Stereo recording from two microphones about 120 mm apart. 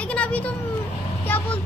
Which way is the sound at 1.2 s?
15° left (ahead or behind).